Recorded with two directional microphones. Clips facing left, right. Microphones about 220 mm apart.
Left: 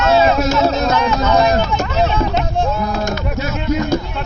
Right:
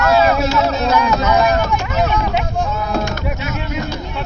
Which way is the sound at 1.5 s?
30° left (ahead or behind).